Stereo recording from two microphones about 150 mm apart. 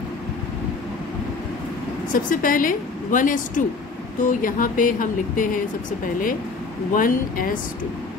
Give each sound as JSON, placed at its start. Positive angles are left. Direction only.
{"t": 2.1, "sound": "a woman's voice", "side_deg": 65}
{"t": 6.9, "sound": "speech", "side_deg": 70}